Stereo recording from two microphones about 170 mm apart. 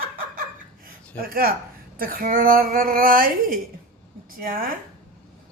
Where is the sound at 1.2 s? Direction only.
60° right (ahead or behind).